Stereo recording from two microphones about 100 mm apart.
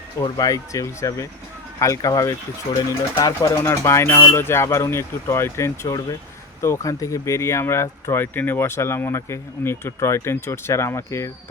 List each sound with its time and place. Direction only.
0.2 s speech: 35° left (ahead or behind)
3.4 s speech: 30° left (ahead or behind)